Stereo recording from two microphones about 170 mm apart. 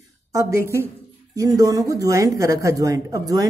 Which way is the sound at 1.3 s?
20° right (ahead or behind).